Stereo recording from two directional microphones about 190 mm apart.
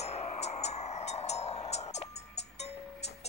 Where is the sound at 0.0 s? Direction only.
35° left (ahead or behind).